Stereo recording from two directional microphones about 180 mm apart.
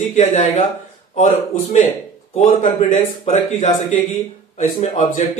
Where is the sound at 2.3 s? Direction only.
40° left (ahead or behind).